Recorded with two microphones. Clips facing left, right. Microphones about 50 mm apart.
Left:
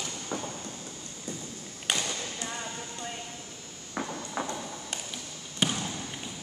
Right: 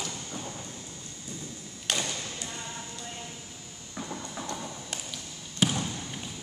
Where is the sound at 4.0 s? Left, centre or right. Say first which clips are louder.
Left 4 dB; left.